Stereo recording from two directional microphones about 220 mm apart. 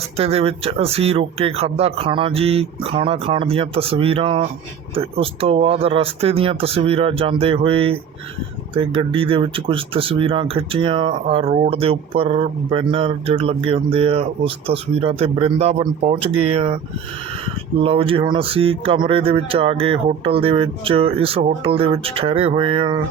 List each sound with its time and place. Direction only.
0.2 s speech: 25° right (ahead or behind)
17.8 s speech: 25° right (ahead or behind)